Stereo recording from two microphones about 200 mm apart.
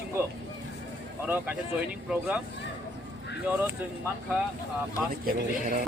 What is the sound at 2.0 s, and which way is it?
Speech, 5° right (ahead or behind).